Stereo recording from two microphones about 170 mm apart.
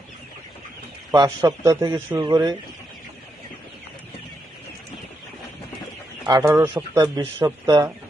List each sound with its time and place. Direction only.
1.1 s a man's voice: 20° right (ahead or behind)
6.2 s a man's voice: 20° right (ahead or behind)